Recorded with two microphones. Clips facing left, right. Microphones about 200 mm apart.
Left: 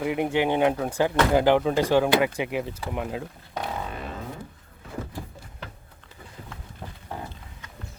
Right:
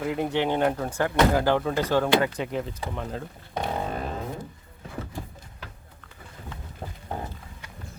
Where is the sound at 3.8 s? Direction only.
40° right (ahead or behind).